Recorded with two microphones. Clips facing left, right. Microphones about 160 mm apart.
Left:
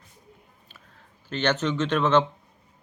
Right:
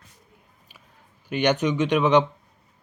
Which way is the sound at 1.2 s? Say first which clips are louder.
Right 3 dB; 15° right (ahead or behind).